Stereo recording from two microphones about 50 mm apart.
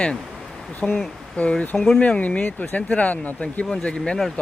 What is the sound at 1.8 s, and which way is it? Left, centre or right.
Speech, centre.